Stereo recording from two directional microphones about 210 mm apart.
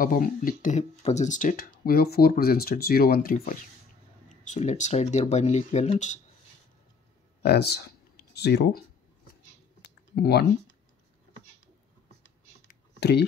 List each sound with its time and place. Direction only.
0.0 s speech: 40° left (ahead or behind)
4.5 s speech: 35° left (ahead or behind)
7.4 s speech: 50° left (ahead or behind)
9.8 s a sound: 50° left (ahead or behind)